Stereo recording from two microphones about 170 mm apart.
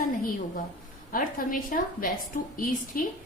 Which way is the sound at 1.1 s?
55° left (ahead or behind).